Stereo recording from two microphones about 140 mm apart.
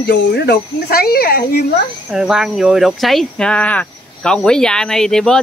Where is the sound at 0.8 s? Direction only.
90° left.